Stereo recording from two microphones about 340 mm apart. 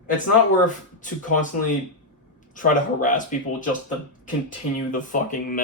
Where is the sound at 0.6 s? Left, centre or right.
Left.